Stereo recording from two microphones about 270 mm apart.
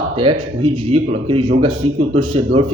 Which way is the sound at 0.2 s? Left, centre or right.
Centre.